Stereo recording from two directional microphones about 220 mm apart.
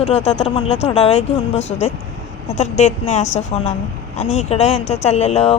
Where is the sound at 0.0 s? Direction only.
30° left (ahead or behind).